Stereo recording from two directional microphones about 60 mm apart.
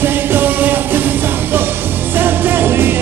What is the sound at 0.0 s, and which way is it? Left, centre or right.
Music, right.